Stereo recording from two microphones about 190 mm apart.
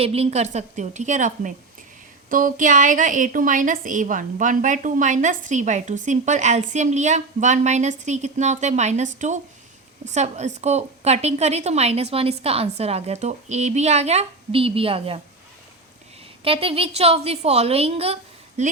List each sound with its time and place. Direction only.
0.0 s a woman's voice: 30° right (ahead or behind)
16.4 s a woman's voice: 30° right (ahead or behind)